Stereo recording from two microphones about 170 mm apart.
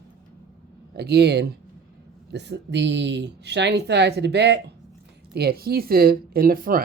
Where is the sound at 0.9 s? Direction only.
75° right (ahead or behind).